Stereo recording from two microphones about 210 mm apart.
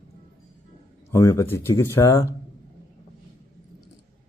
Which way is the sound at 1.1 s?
15° left (ahead or behind).